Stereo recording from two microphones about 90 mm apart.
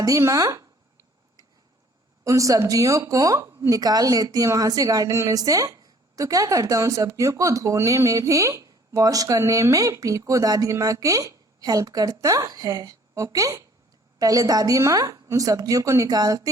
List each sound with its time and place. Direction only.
0.0 s speech: 35° right (ahead or behind)
2.2 s speech: 35° right (ahead or behind)